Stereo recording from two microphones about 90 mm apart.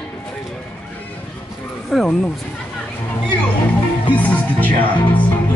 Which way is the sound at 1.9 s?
Centre (ahead or behind).